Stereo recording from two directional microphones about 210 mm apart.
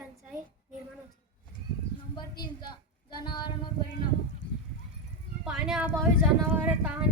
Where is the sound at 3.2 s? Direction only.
20° left (ahead or behind).